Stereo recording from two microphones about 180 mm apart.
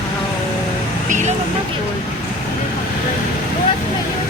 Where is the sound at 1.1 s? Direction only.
40° right (ahead or behind).